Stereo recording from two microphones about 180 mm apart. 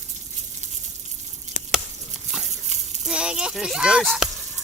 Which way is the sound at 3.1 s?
5° right (ahead or behind).